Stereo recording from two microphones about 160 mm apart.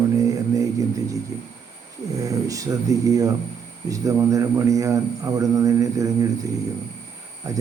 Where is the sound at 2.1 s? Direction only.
20° right (ahead or behind).